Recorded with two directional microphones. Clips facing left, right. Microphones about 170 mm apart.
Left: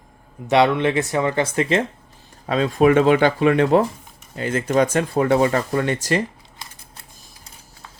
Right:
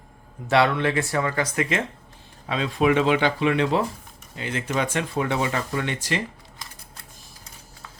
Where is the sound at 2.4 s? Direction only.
45° left (ahead or behind).